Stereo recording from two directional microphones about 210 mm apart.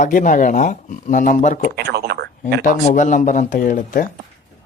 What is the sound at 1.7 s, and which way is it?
Speech, 50° right (ahead or behind).